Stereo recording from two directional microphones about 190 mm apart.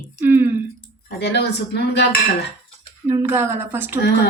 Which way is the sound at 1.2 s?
60° left (ahead or behind).